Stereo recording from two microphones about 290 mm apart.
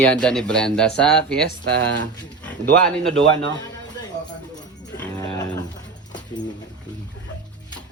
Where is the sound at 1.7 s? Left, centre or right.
Right.